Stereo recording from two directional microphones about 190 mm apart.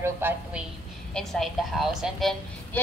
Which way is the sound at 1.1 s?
Centre (ahead or behind).